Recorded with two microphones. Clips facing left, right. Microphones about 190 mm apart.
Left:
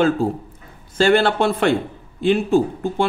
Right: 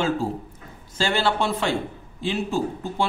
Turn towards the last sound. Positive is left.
turn(degrees=55)  # may be behind; listen again after turning